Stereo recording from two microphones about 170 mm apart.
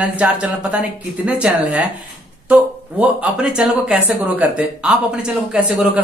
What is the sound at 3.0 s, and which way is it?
Speech, 5° right (ahead or behind).